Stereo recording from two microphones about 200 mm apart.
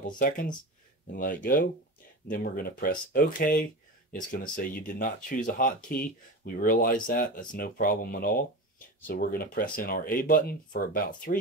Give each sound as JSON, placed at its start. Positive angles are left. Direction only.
{"t": 0.0, "sound": "speech", "side_deg": 40}